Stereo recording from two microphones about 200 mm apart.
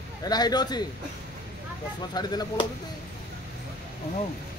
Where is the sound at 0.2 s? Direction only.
20° left (ahead or behind).